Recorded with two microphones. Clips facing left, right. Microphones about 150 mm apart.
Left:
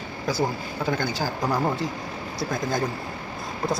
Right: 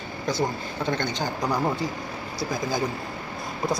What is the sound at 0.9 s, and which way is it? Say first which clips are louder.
Speech: left 1 dB; 5° left (ahead or behind).